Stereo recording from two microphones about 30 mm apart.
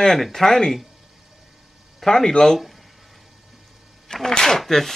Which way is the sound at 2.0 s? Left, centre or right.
Centre.